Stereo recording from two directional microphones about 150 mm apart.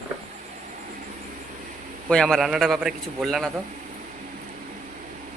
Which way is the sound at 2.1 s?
5° left (ahead or behind).